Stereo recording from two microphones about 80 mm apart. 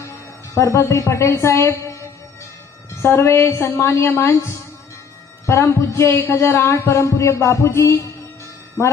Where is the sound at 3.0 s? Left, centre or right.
Left.